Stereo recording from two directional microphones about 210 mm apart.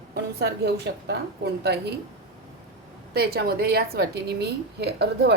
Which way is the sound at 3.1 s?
50° right (ahead or behind).